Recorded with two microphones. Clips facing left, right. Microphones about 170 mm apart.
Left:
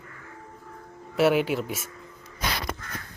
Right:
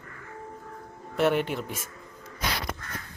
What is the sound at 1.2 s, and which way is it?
Speech, 5° left (ahead or behind).